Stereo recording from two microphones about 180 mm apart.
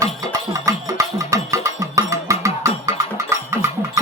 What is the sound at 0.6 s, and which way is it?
Music, 20° right (ahead or behind).